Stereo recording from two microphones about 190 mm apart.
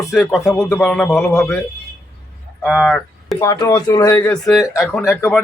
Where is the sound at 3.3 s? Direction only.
20° left (ahead or behind).